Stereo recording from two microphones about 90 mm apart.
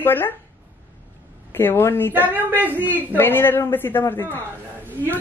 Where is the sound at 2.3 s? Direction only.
20° right (ahead or behind).